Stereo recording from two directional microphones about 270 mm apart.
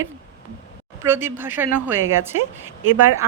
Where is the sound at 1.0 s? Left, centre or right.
Centre.